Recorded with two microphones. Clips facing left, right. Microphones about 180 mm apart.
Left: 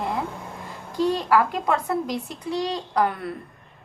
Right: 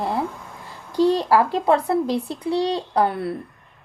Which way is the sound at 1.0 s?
30° right (ahead or behind).